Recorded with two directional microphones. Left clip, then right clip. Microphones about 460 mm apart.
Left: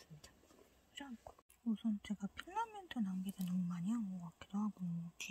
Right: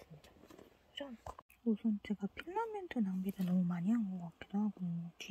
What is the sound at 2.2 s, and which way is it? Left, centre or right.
Speech, centre.